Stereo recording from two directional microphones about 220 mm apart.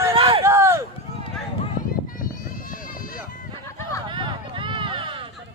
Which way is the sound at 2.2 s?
40° left (ahead or behind).